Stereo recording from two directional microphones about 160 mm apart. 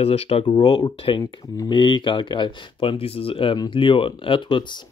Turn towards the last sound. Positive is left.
turn(degrees=30)  # may be behind; listen again after turning